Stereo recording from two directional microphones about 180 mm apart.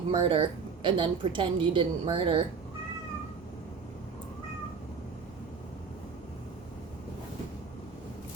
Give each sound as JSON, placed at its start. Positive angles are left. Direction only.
{"t": 0.1, "sound": "a woman's voice", "side_deg": -30}